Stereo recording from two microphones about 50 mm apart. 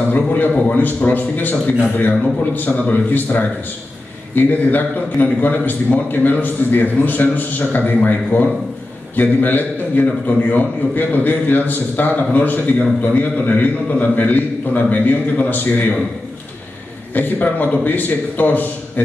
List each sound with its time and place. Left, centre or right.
0.1 s a man's voice: left
9.1 s a man's voice: left
17.1 s a man's voice: left